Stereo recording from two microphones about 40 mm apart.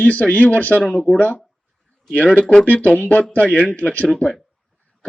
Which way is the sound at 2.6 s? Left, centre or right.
Left.